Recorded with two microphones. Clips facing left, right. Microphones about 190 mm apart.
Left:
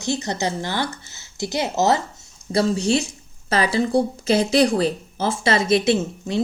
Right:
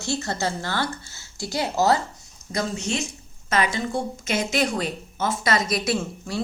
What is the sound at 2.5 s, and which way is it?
A woman's voice, 35° left (ahead or behind).